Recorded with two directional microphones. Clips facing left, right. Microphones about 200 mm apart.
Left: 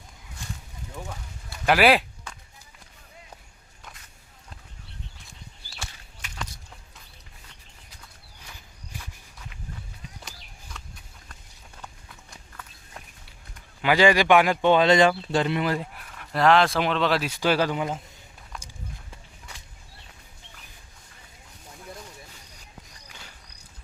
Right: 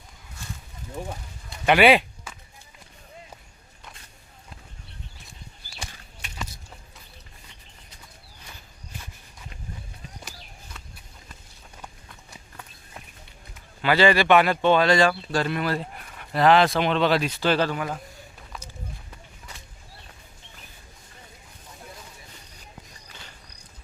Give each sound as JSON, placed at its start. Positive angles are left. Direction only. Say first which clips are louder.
{"t": 1.6, "sound": "a sound", "louder": "right 2 dB", "side_deg": 0}
{"t": 13.8, "sound": "speech", "louder": "even", "side_deg": 15}
{"t": 16.1, "sound": "speech", "louder": "right 1 dB", "side_deg": 0}
{"t": 18.5, "sound": "walk", "louder": "right 1 dB", "side_deg": 0}
{"t": 23.0, "sound": "walk", "louder": "right 1 dB", "side_deg": 10}